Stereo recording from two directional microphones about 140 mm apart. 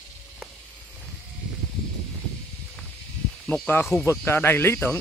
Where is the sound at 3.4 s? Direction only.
Centre (ahead or behind).